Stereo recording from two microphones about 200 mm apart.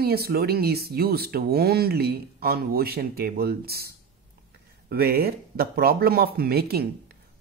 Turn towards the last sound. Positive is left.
turn(degrees=-50)  # may be behind; listen again after turning